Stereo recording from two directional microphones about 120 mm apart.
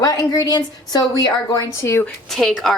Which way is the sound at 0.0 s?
30° left (ahead or behind).